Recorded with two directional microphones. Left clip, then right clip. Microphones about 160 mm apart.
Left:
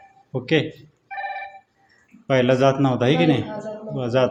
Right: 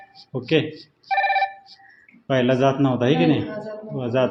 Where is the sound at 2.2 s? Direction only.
30° left (ahead or behind).